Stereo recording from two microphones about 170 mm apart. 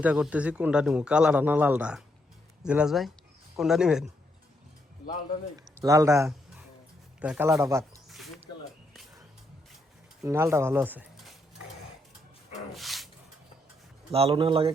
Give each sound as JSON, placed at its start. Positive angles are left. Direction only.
{"t": 0.0, "sound": "speech", "side_deg": -5}
{"t": 5.5, "sound": "speech", "side_deg": -20}
{"t": 10.2, "sound": "speech", "side_deg": -15}
{"t": 12.7, "sound": "dog", "side_deg": 0}
{"t": 14.1, "sound": "speech", "side_deg": -35}